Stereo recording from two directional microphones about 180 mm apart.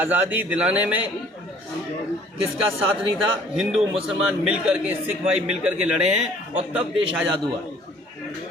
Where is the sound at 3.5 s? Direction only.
Centre (ahead or behind).